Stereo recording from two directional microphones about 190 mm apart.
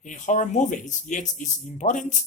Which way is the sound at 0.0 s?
40° left (ahead or behind).